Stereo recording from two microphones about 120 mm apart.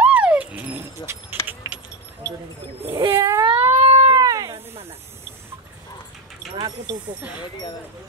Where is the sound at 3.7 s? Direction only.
65° right (ahead or behind).